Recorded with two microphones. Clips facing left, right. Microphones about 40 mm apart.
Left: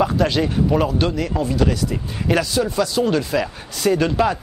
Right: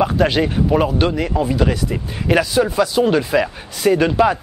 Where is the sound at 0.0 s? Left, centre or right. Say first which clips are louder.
Right 2 dB; centre.